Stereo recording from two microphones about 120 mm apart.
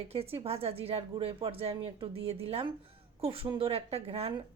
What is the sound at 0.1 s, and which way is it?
A woman's voice, 55° right (ahead or behind).